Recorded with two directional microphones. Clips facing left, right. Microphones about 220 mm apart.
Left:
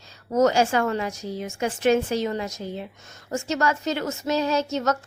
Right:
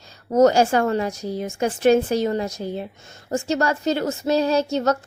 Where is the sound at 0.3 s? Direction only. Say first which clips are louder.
Right 4 dB; 35° right (ahead or behind).